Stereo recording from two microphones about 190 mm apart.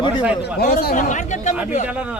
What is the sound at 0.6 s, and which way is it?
Speech, 55° left (ahead or behind).